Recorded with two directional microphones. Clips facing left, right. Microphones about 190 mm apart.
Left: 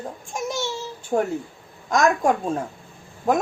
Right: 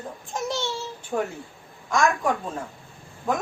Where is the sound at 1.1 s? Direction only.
45° left (ahead or behind).